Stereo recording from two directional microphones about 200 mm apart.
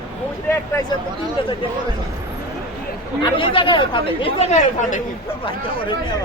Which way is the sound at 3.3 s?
25° left (ahead or behind).